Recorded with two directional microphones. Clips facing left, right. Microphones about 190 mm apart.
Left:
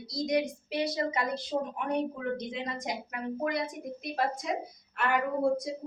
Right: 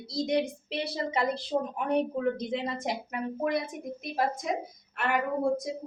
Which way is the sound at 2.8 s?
25° right (ahead or behind).